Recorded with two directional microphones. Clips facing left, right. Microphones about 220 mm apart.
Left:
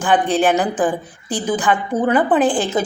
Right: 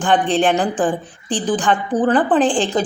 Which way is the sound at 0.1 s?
5° left (ahead or behind).